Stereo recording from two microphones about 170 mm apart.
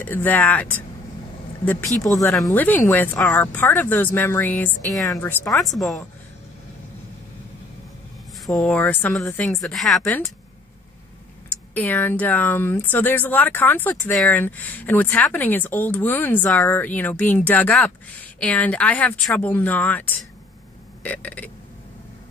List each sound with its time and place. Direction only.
0.0 s speech: 10° left (ahead or behind)
2.0 s speech: 20° left (ahead or behind)
5.5 s speech: centre (ahead or behind)
8.5 s speech: 5° left (ahead or behind)
11.4 s speech: 10° left (ahead or behind)